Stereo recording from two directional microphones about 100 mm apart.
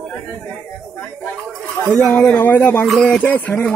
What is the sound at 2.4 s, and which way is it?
Speech, 15° left (ahead or behind).